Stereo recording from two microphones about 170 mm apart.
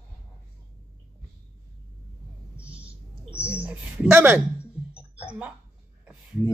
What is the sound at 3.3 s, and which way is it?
Speech, 10° right (ahead or behind).